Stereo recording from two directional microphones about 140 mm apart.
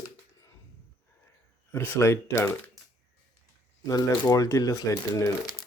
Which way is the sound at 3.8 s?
25° left (ahead or behind).